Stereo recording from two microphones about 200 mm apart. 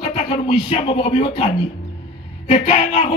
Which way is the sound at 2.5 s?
30° left (ahead or behind).